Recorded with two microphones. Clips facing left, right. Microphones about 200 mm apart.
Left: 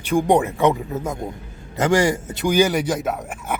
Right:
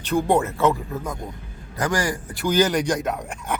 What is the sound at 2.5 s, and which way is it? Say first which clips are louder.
A man's voice: left 1 dB; 10° left (ahead or behind).